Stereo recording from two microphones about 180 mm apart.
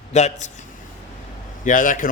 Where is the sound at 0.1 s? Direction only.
40° left (ahead or behind).